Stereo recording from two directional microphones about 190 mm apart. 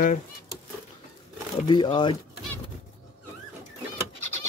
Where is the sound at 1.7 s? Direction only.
25° left (ahead or behind).